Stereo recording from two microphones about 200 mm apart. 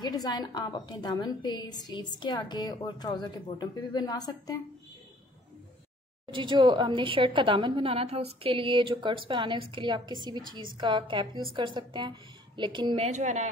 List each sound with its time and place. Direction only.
0.0 s a woman's voice: 20° left (ahead or behind)
6.3 s a woman's voice: 25° right (ahead or behind)